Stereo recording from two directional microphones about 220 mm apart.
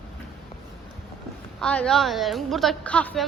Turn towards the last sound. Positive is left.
turn(degrees=5)  # may be behind; listen again after turning